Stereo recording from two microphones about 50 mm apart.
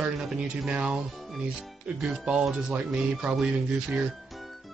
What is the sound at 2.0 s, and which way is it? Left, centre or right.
Speech, centre.